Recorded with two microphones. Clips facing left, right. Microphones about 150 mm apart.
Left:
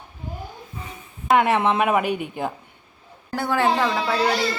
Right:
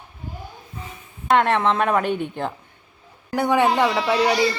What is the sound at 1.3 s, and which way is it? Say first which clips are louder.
A woman's voice: even; 10° left (ahead or behind).